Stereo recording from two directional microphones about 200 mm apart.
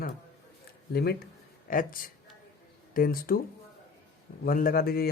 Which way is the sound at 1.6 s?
45° left (ahead or behind).